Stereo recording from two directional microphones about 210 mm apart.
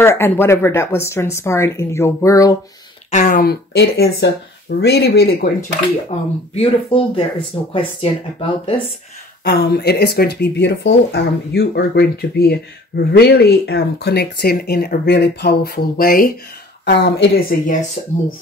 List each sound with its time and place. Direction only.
0.0 s speech: 10° left (ahead or behind)
3.1 s speech: 35° left (ahead or behind)
6.0 s speech: 30° left (ahead or behind)
9.4 s speech: 45° left (ahead or behind)
16.8 s speech: 55° left (ahead or behind)